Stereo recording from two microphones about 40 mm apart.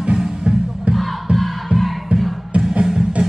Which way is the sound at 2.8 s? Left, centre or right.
Centre.